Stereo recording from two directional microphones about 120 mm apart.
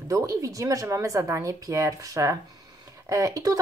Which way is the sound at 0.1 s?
30° right (ahead or behind).